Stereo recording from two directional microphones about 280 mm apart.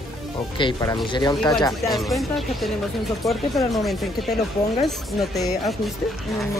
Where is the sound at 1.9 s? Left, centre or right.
Centre.